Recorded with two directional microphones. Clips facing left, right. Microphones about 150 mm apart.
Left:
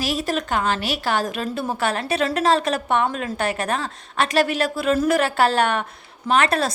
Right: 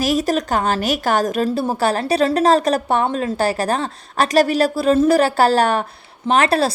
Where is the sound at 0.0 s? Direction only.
40° right (ahead or behind).